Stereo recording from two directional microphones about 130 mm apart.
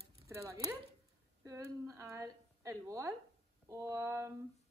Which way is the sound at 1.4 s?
25° right (ahead or behind).